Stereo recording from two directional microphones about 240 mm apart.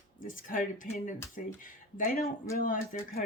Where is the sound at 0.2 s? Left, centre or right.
Left.